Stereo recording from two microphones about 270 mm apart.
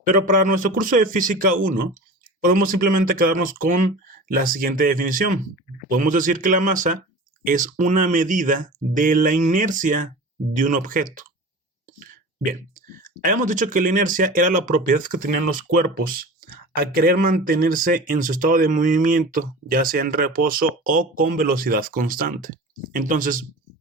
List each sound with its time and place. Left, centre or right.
0.1 s speech: right
12.5 s speech: right